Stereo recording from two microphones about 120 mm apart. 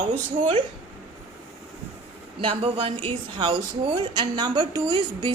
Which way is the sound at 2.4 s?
45° right (ahead or behind).